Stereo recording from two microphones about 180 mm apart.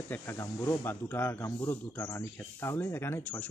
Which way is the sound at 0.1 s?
15° left (ahead or behind).